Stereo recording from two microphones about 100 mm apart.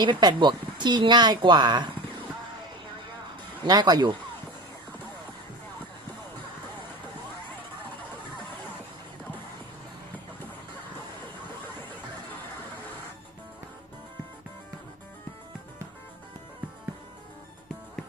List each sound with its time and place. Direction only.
0.0 s speech: 45° right (ahead or behind)
3.6 s speech: 45° right (ahead or behind)